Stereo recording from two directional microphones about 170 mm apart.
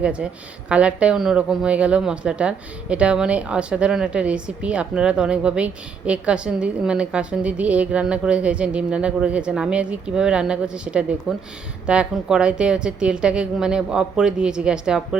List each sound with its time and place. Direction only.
0.0 s a woman's voice: 5° right (ahead or behind)